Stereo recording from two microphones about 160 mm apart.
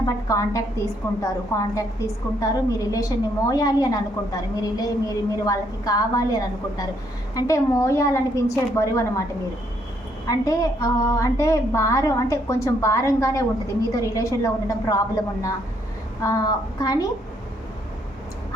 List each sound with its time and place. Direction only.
0.0 s a woman's voice: 20° left (ahead or behind)
10.2 s a woman's voice: 20° left (ahead or behind)
16.2 s a woman's voice: 25° left (ahead or behind)